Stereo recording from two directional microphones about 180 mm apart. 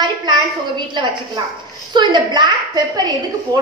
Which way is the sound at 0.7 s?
25° right (ahead or behind).